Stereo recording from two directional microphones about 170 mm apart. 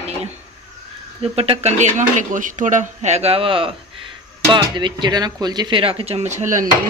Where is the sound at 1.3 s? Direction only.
35° right (ahead or behind).